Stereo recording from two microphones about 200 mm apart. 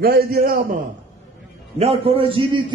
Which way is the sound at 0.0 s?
50° right (ahead or behind).